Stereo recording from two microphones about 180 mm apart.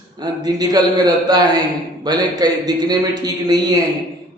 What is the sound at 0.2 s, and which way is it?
A man's voice, 20° right (ahead or behind).